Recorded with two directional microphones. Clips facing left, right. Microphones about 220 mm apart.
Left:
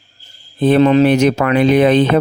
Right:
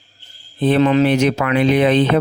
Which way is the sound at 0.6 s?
40° left (ahead or behind).